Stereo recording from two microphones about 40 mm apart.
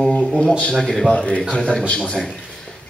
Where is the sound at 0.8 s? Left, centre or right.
Centre.